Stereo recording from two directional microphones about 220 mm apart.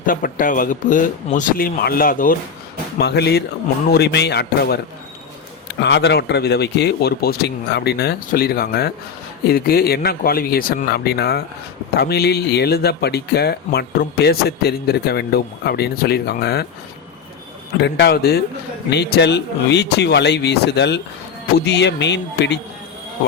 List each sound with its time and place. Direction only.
0.0 s speech: 40° left (ahead or behind)
5.8 s speech: 50° left (ahead or behind)
17.7 s speech: 50° left (ahead or behind)